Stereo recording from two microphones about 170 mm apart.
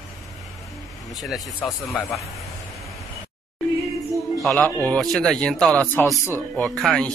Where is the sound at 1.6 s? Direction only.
10° left (ahead or behind).